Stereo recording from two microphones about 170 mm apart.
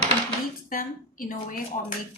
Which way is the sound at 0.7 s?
55° left (ahead or behind).